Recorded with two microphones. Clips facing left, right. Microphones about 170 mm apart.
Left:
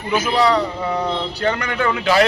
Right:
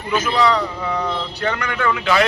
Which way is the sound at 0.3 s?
30° left (ahead or behind).